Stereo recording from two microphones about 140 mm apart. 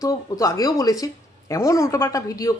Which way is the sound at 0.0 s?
25° left (ahead or behind).